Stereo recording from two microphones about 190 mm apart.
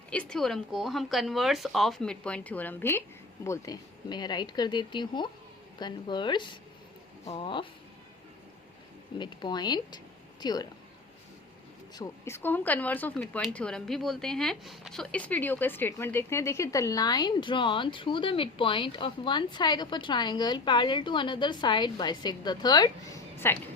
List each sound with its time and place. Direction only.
0.1 s speech: 5° left (ahead or behind); by 7.7 s 25° left (ahead or behind)
9.1 s speech: 25° left (ahead or behind)
11.9 s speech: 15° left (ahead or behind)